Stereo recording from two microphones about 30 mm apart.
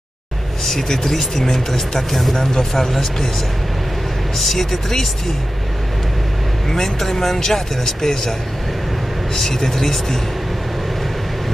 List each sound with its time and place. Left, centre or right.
0.8 s speech: centre
4.4 s speech: centre
6.7 s speech: centre